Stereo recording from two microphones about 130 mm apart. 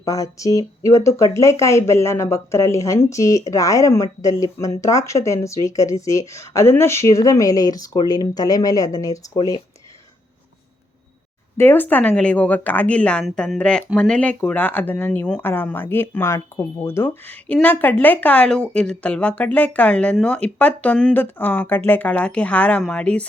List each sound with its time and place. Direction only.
0.0 s speech: 25° left (ahead or behind)
11.5 s a woman's voice: 15° left (ahead or behind)